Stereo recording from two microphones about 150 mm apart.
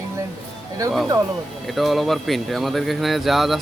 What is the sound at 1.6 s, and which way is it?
Speech, centre (ahead or behind).